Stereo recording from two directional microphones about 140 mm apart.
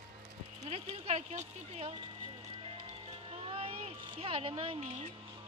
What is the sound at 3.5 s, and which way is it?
Speech, 45° right (ahead or behind).